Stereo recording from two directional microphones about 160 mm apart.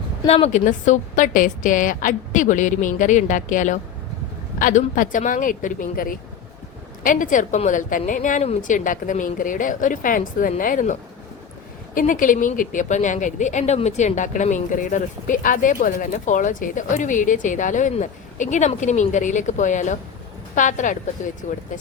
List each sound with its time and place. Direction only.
0.3 s a woman's voice: 40° left (ahead or behind); by 10.9 s 55° left (ahead or behind)
11.9 s speech: 55° left (ahead or behind)